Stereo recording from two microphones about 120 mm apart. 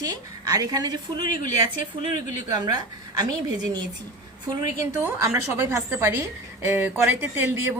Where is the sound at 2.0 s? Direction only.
90° left.